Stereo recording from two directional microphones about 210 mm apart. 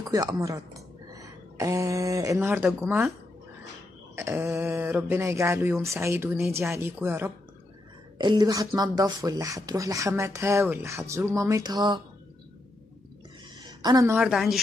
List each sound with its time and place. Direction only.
0.0 s speech: 20° right (ahead or behind)
4.1 s speech: 15° right (ahead or behind)
13.6 s a sound: 20° right (ahead or behind)
14.1 s speech: centre (ahead or behind)